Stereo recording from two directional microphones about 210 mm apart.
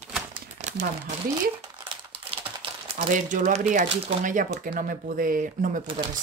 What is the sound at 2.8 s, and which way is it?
Speech, 30° right (ahead or behind).